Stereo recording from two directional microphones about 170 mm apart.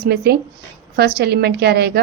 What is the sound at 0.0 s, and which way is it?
A woman's voice, 70° right (ahead or behind).